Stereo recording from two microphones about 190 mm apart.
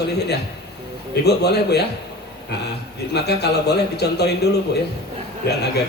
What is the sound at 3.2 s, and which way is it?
Speech, 60° left (ahead or behind).